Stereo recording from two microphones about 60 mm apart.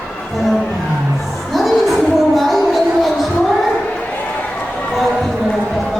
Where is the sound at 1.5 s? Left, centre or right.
Centre.